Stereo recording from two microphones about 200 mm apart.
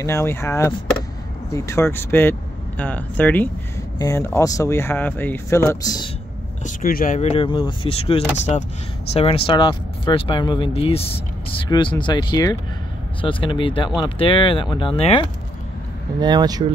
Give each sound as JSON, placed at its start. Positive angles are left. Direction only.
{"t": 0.0, "sound": "speech", "side_deg": 15}
{"t": 6.6, "sound": "speech", "side_deg": 45}
{"t": 16.2, "sound": "speech", "side_deg": -20}